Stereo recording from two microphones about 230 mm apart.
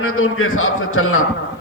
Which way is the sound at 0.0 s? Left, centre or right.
Left.